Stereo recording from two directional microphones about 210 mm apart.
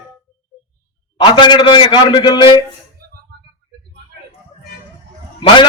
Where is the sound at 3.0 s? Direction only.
45° right (ahead or behind).